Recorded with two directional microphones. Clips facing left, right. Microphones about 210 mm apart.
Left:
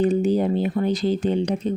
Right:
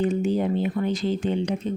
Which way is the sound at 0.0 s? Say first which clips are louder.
Left 4 dB; 35° left (ahead or behind).